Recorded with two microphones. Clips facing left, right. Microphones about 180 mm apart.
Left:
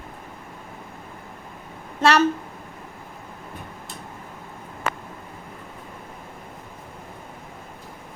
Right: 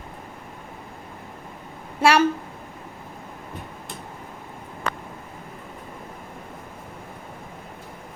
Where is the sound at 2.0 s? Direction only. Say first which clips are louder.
Even; 10° right (ahead or behind).